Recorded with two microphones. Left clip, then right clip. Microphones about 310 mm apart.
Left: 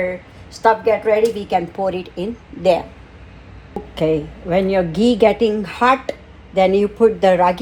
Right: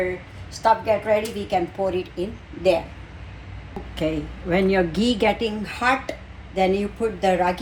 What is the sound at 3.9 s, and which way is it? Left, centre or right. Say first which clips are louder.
A woman's voice: left 8 dB; centre.